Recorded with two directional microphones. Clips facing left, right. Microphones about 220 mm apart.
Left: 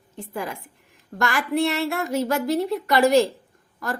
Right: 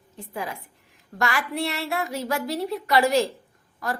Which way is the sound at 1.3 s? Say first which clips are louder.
Left 5 dB; 45° left (ahead or behind).